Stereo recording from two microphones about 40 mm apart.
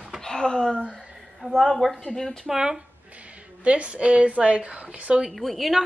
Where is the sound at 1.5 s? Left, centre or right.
Centre.